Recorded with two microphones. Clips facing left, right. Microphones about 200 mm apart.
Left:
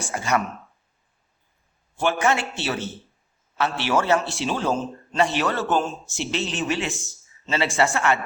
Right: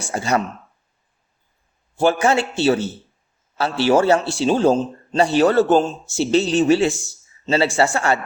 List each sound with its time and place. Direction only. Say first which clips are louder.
0.1 s speech: right 4 dB; 35° right (ahead or behind)
2.0 s speech: right 5 dB; 35° right (ahead or behind)